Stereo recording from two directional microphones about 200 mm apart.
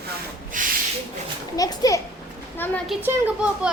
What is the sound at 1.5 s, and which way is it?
Speech, 20° left (ahead or behind).